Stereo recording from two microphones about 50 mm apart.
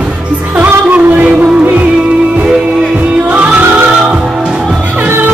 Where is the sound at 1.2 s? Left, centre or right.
Right.